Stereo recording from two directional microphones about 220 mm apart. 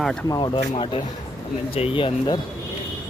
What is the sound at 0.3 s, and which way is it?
Speech, 20° left (ahead or behind).